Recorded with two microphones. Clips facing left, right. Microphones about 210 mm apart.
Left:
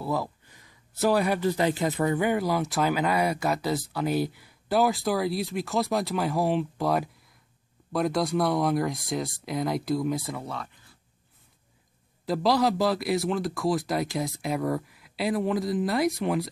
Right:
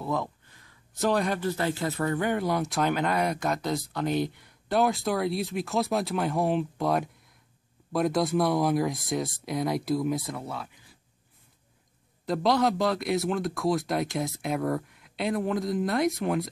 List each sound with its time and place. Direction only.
0.0 s speech: 5° left (ahead or behind)
12.3 s speech: centre (ahead or behind)